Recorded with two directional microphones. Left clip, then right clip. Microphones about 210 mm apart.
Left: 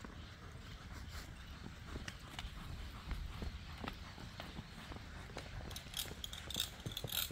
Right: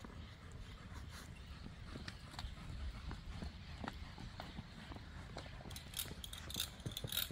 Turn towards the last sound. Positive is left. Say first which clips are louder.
# left 1 dB
turn(degrees=-50)  # may be behind; listen again after turning